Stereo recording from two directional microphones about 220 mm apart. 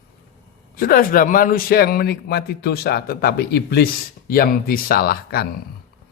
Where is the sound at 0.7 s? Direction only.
40° left (ahead or behind).